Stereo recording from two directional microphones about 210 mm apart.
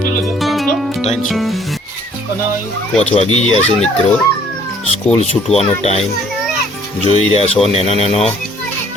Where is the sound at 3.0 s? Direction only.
30° left (ahead or behind).